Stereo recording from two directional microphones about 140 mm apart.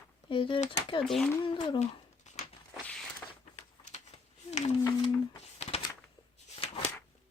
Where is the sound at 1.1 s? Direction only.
Centre (ahead or behind).